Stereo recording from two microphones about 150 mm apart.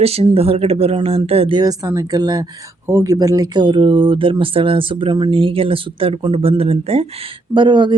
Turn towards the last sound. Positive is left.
turn(degrees=-30)  # may be behind; listen again after turning